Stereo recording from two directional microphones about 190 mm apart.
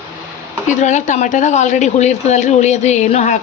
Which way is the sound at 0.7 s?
40° left (ahead or behind).